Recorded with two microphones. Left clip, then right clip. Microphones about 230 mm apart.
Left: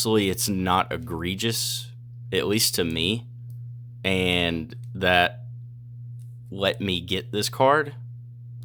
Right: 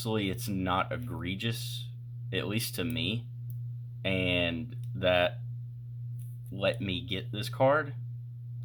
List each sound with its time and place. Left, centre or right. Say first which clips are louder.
0.0 s speech: left 10 dB; left
6.5 s speech: left 6 dB; left